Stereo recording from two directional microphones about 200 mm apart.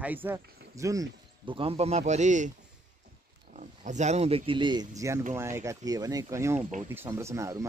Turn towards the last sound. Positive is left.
turn(degrees=-15)  # may be behind; listen again after turning